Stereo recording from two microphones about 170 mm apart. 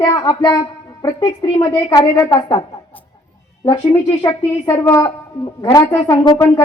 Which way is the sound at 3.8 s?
10° left (ahead or behind).